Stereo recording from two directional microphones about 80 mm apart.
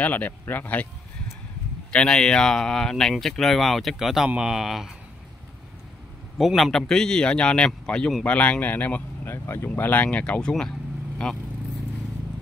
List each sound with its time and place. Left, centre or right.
0.0 s speech: left
1.9 s speech: centre
6.3 s a man's voice: centre